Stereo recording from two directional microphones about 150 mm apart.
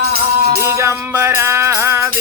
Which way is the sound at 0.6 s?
20° right (ahead or behind).